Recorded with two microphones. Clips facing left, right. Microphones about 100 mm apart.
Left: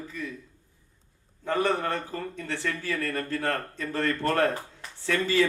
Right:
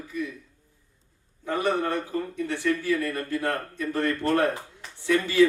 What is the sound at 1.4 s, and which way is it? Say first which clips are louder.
A man's voice: right 1 dB; 15° right (ahead or behind).